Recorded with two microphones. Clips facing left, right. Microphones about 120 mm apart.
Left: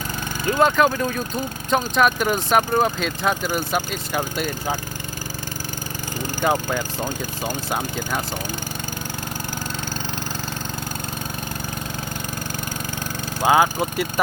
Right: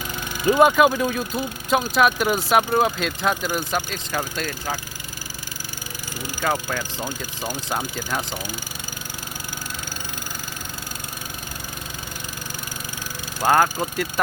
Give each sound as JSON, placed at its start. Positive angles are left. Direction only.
{"t": 0.4, "sound": "speech", "side_deg": -10}
{"t": 6.4, "sound": "speech", "side_deg": 15}
{"t": 7.0, "sound": "speech", "side_deg": -10}
{"t": 13.5, "sound": "speech", "side_deg": 10}